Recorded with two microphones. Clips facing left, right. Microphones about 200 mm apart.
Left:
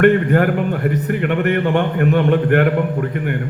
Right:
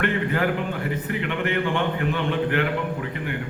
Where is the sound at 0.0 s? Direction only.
50° left (ahead or behind).